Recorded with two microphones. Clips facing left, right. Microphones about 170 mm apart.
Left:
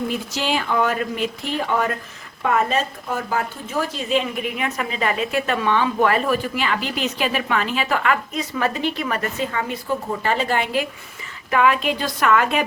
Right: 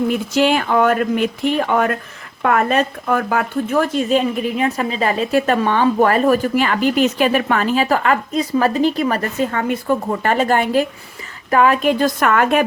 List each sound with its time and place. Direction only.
0.1 s speech: 55° right (ahead or behind)